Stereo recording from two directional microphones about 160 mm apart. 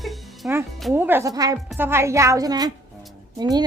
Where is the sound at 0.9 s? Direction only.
15° right (ahead or behind).